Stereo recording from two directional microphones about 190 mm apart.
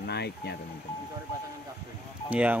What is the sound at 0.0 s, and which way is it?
Speech, 60° left (ahead or behind).